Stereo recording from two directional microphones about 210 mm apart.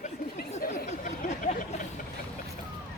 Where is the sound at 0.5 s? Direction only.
35° left (ahead or behind).